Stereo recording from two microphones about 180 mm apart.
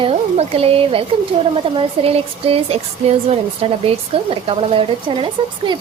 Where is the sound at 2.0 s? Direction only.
35° right (ahead or behind).